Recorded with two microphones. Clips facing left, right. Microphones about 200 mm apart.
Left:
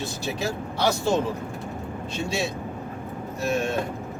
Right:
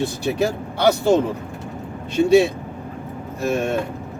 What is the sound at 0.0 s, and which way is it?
Speech, 60° right (ahead or behind).